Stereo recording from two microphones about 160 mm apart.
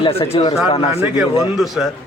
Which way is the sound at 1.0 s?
5° right (ahead or behind).